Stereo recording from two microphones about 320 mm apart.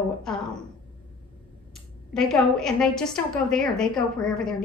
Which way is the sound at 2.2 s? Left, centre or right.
Centre.